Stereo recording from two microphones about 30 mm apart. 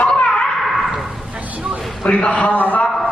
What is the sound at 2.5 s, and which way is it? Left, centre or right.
Speech, left.